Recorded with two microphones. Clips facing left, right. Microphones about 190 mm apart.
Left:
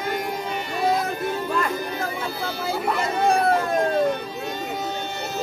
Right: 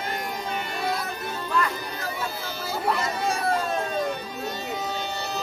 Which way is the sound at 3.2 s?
55° left (ahead or behind).